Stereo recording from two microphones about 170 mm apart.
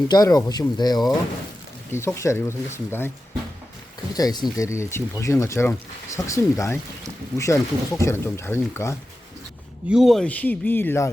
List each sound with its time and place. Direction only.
0.1 s speech: 20° left (ahead or behind)
4.1 s speech: 20° left (ahead or behind)
9.9 s speech: centre (ahead or behind)